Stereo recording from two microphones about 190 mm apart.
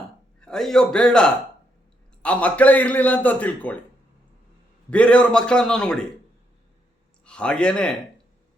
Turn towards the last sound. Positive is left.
turn(degrees=5)  # may be behind; listen again after turning